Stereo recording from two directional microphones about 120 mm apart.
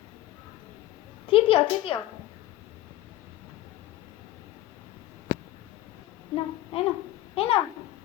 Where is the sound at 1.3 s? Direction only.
50° left (ahead or behind).